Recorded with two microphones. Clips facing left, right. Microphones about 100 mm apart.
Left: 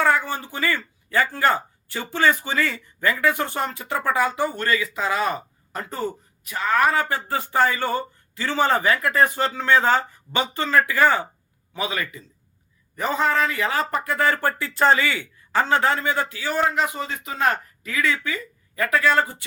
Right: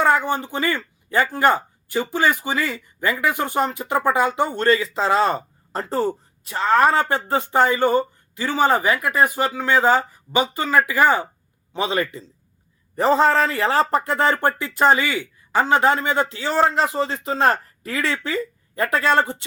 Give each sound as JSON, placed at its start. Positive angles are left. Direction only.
{"t": 0.0, "sound": "speech", "side_deg": -20}
{"t": 11.7, "sound": "speech", "side_deg": -25}